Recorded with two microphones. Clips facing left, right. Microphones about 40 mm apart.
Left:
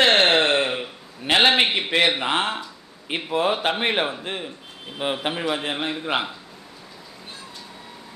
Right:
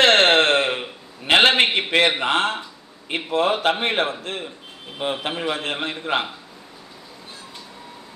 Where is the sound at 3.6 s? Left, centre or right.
Centre.